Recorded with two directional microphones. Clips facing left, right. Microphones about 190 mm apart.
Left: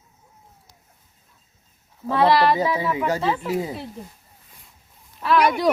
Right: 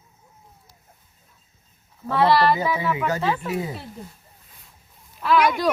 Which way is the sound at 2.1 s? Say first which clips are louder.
Left 1 dB; 15° left (ahead or behind).